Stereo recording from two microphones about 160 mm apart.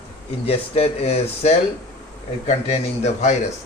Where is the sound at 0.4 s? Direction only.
40° left (ahead or behind).